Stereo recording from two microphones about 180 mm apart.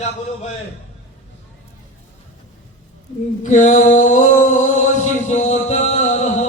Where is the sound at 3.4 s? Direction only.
45° left (ahead or behind).